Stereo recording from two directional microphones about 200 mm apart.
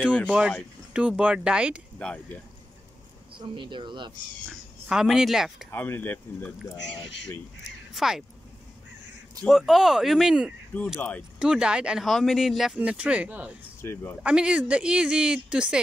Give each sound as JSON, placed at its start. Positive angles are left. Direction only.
{"t": 0.3, "sound": "speech", "side_deg": -5}
{"t": 2.0, "sound": "speech", "side_deg": 10}
{"t": 3.3, "sound": "speech", "side_deg": -25}
{"t": 4.5, "sound": "speech", "side_deg": 0}
{"t": 5.7, "sound": "speech", "side_deg": 10}
{"t": 7.6, "sound": "speech", "side_deg": 0}
{"t": 9.4, "sound": "speech", "side_deg": 0}
{"t": 11.0, "sound": "speech", "side_deg": 10}
{"t": 11.3, "sound": "speech", "side_deg": -5}
{"t": 13.7, "sound": "speech", "side_deg": 10}
{"t": 14.2, "sound": "speech", "side_deg": -5}